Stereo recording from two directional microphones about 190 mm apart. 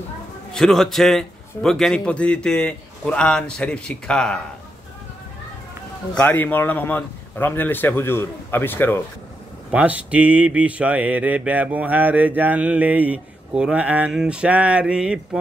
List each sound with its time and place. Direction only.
0.5 s a man's voice: centre (ahead or behind)
6.1 s speech: 10° left (ahead or behind)
9.7 s speech: 5° right (ahead or behind)